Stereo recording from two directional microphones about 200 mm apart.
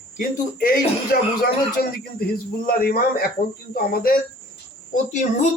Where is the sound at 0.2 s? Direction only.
45° left (ahead or behind).